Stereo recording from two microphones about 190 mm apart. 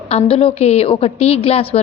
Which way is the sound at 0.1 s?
30° left (ahead or behind).